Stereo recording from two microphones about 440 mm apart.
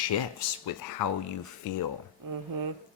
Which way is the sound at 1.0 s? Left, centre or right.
Left.